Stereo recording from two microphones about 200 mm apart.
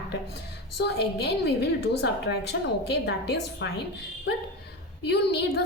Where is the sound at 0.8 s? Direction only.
55° left (ahead or behind).